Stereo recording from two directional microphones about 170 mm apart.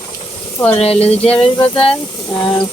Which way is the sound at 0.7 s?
35° left (ahead or behind).